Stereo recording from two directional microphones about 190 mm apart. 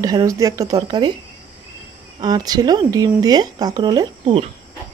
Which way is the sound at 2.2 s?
20° right (ahead or behind).